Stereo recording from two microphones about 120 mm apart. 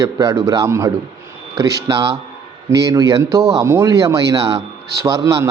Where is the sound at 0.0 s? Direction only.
25° right (ahead or behind).